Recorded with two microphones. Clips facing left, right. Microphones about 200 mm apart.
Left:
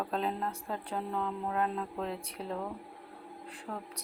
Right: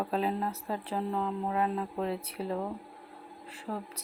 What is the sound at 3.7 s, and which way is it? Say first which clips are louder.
Speech: right 4 dB; 15° right (ahead or behind).